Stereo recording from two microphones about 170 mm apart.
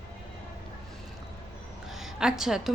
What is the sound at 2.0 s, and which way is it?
Speech, 5° right (ahead or behind).